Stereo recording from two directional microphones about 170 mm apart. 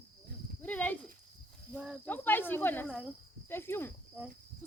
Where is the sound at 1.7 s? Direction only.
5° right (ahead or behind).